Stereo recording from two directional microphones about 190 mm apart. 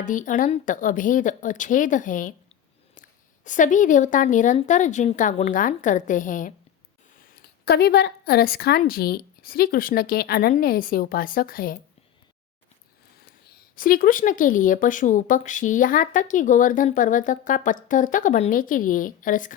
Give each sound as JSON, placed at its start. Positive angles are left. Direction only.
{"t": 0.0, "sound": "a woman's voice", "side_deg": 45}
{"t": 13.7, "sound": "speech", "side_deg": 45}